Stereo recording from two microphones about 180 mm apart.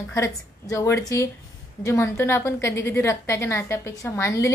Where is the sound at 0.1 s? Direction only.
15° left (ahead or behind).